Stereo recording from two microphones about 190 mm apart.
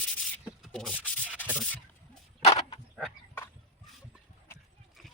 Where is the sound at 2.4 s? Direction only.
35° left (ahead or behind).